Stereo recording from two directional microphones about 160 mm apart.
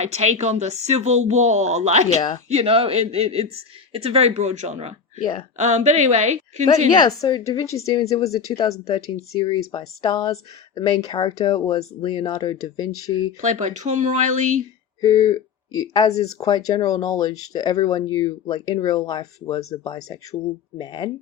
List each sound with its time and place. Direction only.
0.0 s speech: 45° right (ahead or behind)
5.2 s speech: 30° left (ahead or behind)
5.5 s speech: 50° right (ahead or behind)
6.9 s speech: 25° left (ahead or behind)
13.4 s speech: 50° right (ahead or behind)
15.0 s speech: 20° left (ahead or behind)